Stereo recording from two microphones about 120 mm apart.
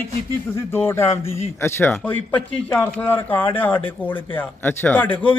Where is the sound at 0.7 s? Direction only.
20° left (ahead or behind).